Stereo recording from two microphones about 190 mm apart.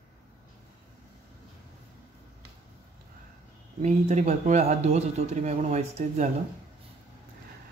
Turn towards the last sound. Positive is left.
turn(degrees=-35)  # may be behind; listen again after turning